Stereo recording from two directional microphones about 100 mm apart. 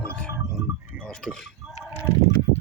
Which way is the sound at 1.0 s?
10° left (ahead or behind).